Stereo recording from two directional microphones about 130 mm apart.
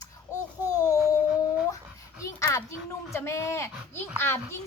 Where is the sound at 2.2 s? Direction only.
25° left (ahead or behind).